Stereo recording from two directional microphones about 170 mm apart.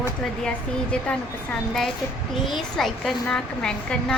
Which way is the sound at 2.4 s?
Centre (ahead or behind).